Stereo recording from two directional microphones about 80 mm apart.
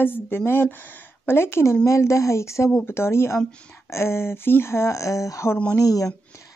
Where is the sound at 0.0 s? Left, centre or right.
Left.